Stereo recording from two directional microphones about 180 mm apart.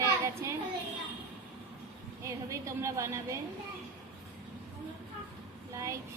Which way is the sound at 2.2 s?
15° right (ahead or behind).